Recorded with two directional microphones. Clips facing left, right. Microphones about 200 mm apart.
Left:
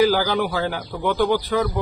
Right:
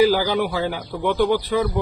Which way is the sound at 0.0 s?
5° right (ahead or behind).